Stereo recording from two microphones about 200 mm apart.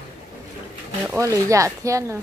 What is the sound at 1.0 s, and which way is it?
Speech, 15° right (ahead or behind).